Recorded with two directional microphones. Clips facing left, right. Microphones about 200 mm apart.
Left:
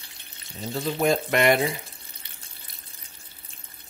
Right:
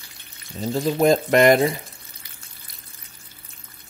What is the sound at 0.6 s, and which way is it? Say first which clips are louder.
Speech: right 6 dB; 35° right (ahead or behind).